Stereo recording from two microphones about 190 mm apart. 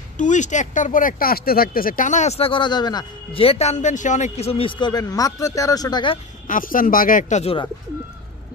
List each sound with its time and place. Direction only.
0.2 s speech: 40° left (ahead or behind); by 6.1 s 20° left (ahead or behind)
6.4 s speech: 45° left (ahead or behind)